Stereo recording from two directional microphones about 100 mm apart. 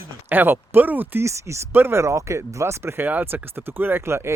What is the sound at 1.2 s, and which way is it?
Speech, 30° right (ahead or behind).